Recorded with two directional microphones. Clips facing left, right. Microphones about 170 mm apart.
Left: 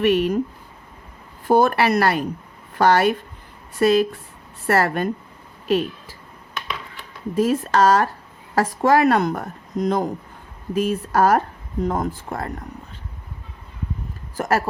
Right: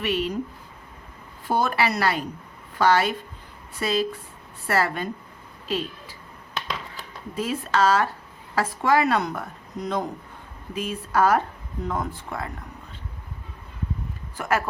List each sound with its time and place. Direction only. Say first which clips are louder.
0.0 s a woman's voice: left 8 dB; 55° left (ahead or behind)
1.5 s a woman's voice: left 7 dB; 55° left (ahead or behind)
7.3 s a woman's voice: left 6 dB; 45° left (ahead or behind)
14.3 s speech: left 4 dB; 40° left (ahead or behind)